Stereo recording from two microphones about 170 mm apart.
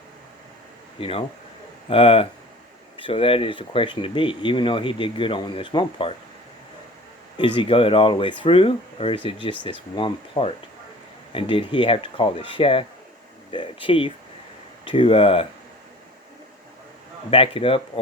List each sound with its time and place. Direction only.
0.9 s speech: 35° left (ahead or behind)
7.3 s speech: 30° left (ahead or behind)
17.3 s speech: 35° left (ahead or behind)